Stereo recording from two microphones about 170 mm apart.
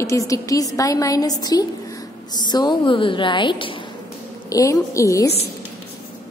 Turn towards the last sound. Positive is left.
turn(degrees=20)  # may be behind; listen again after turning